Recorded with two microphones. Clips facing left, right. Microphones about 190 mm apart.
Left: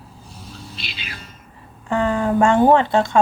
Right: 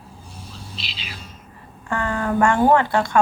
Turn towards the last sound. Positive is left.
turn(degrees=20)  # may be behind; listen again after turning